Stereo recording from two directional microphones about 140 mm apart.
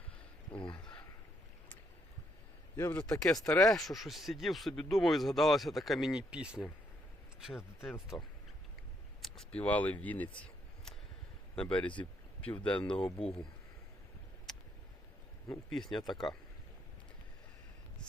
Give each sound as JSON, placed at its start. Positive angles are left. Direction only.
{"t": 0.5, "sound": "speech", "side_deg": 35}
{"t": 2.7, "sound": "speech", "side_deg": 20}
{"t": 3.0, "sound": "speech", "side_deg": 5}
{"t": 9.2, "sound": "speech", "side_deg": 5}
{"t": 11.5, "sound": "speech", "side_deg": 10}
{"t": 14.5, "sound": "a sound", "side_deg": 5}
{"t": 15.4, "sound": "speech", "side_deg": 0}